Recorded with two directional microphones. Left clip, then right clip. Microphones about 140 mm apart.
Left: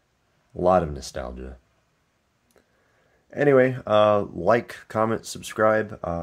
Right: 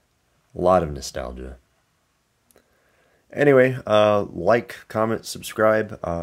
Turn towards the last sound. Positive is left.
turn(degrees=-25)  # may be behind; listen again after turning